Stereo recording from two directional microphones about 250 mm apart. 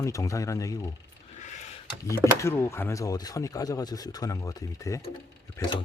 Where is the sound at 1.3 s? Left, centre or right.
Left.